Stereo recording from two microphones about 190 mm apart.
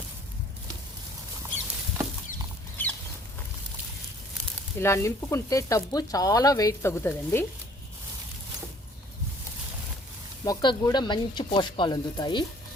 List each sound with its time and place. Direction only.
2.8 s chicken: 10° left (ahead or behind)
4.8 s speech: 15° left (ahead or behind)
10.4 s speech: 20° left (ahead or behind)